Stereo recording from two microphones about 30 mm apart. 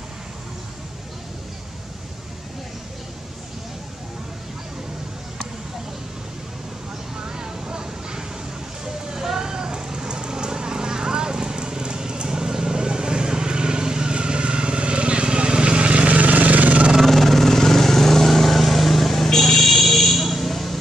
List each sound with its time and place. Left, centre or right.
7.2 s vehicle: right
16.2 s vehicle: right
17.0 s vehicle: centre